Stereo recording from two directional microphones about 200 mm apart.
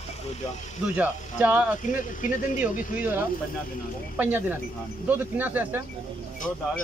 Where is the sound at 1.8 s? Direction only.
40° left (ahead or behind).